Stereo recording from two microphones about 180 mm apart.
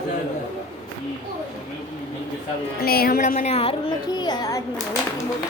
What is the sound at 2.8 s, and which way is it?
Speech, 55° left (ahead or behind).